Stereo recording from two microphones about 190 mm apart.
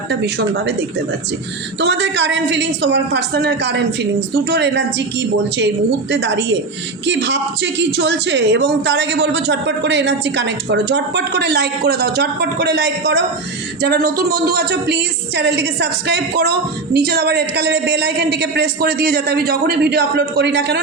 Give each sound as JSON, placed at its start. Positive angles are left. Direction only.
{"t": 0.1, "sound": "a woman's voice", "side_deg": -65}
{"t": 1.8, "sound": "a woman's voice", "side_deg": -70}
{"t": 13.8, "sound": "a woman's voice", "side_deg": -50}